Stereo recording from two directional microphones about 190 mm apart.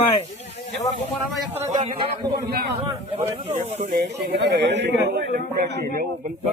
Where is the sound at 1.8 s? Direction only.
25° right (ahead or behind).